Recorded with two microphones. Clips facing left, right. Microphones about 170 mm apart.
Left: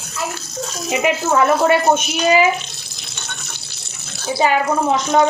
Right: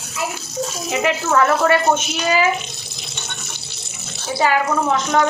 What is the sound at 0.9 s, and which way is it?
Speech, 15° left (ahead or behind).